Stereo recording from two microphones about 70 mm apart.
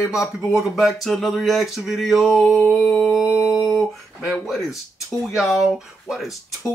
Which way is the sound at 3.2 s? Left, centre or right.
Centre.